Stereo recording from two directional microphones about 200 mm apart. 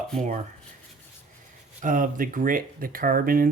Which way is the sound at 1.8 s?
40° right (ahead or behind).